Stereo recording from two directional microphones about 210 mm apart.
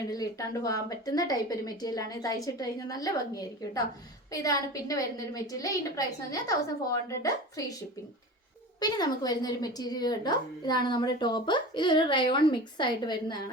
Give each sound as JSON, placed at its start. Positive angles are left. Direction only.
{"t": 0.1, "sound": "speech", "side_deg": 15}
{"t": 8.8, "sound": "speech", "side_deg": 20}